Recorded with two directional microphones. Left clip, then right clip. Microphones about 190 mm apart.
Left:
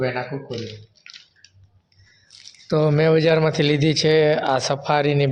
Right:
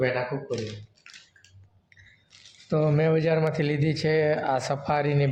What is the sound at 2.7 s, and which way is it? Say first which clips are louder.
Speech: left 6 dB; 20° left (ahead or behind).